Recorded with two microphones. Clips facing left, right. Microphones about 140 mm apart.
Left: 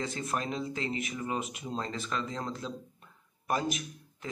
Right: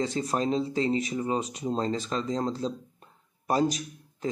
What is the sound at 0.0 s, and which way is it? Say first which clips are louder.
Speech: right 6 dB; 35° right (ahead or behind).